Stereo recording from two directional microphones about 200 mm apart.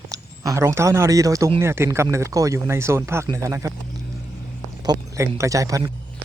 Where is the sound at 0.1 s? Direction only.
15° right (ahead or behind).